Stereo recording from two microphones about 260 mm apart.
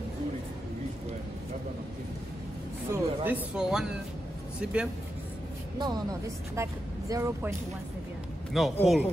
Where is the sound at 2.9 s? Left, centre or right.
Centre.